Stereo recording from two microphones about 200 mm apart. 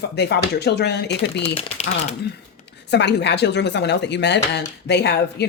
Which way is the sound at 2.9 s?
60° left (ahead or behind).